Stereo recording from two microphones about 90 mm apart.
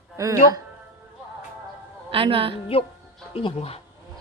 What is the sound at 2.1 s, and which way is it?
Speech, 90° right.